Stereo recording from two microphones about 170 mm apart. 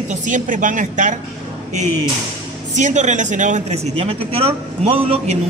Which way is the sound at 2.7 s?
45° right (ahead or behind).